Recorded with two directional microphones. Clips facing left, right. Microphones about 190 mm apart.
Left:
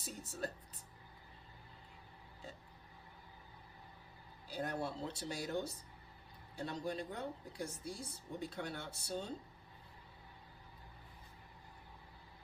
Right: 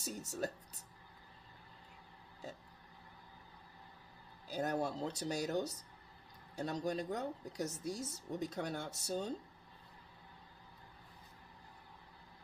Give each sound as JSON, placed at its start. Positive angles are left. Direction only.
{"t": 0.0, "sound": "speech", "side_deg": -40}
{"t": 4.4, "sound": "speech", "side_deg": -45}